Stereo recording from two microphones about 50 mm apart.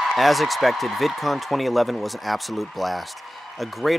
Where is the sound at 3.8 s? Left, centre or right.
Centre.